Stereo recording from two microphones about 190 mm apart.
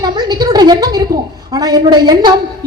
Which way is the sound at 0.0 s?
20° right (ahead or behind).